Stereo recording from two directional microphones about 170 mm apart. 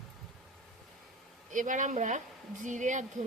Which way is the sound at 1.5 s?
50° right (ahead or behind).